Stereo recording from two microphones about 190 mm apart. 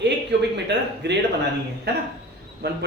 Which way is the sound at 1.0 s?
65° right (ahead or behind).